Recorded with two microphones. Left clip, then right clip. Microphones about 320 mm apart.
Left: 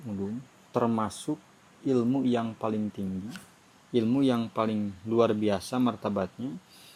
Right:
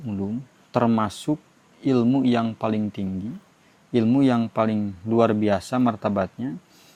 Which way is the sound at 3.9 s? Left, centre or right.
Right.